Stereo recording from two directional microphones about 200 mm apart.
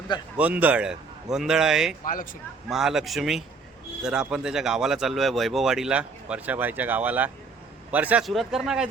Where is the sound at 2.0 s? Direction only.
45° left (ahead or behind).